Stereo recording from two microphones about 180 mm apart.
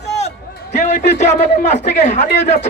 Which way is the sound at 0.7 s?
40° left (ahead or behind).